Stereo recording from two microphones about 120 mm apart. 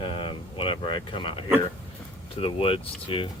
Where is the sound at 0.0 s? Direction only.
45° left (ahead or behind).